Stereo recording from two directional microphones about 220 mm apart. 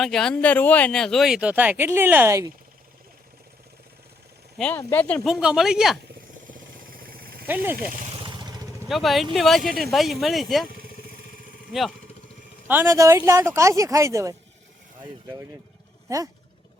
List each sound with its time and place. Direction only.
0.0 s speech: centre (ahead or behind)
4.5 s speech: 5° left (ahead or behind)
6.5 s vehicle: 40° right (ahead or behind)
7.4 s speech: 10° right (ahead or behind)
8.2 s vehicle: 20° right (ahead or behind)
8.9 s speech: centre (ahead or behind)
12.6 s speech: 10° right (ahead or behind)
16.0 s speech: 15° right (ahead or behind)